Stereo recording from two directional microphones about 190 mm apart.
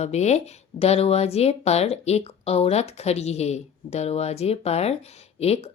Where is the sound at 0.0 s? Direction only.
35° left (ahead or behind).